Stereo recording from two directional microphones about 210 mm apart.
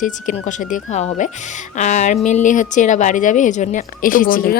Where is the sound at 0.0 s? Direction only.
35° left (ahead or behind).